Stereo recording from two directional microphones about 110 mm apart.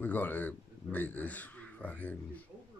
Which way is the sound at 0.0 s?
15° left (ahead or behind).